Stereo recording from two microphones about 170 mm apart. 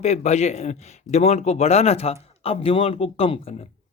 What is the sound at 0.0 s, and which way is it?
Speech, 40° left (ahead or behind).